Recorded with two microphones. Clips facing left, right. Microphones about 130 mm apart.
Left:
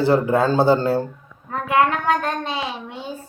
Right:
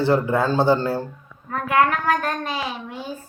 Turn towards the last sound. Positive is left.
turn(degrees=25)  # may be behind; listen again after turning